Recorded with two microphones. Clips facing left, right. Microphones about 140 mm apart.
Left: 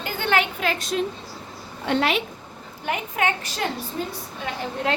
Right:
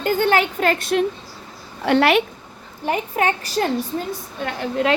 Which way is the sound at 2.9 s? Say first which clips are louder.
Right 4 dB; 35° right (ahead or behind).